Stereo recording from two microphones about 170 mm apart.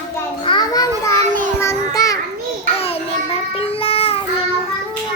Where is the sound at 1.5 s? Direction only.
20° left (ahead or behind).